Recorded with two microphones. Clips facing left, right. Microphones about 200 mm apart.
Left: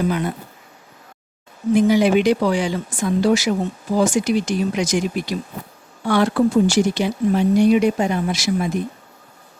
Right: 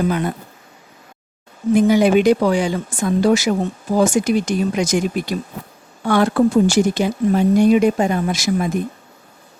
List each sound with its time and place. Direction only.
1.7 s speech: 50° right (ahead or behind)